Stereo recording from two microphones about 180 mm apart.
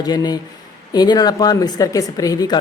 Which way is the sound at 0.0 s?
20° left (ahead or behind).